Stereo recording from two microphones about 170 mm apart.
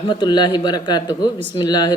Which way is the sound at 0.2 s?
25° left (ahead or behind).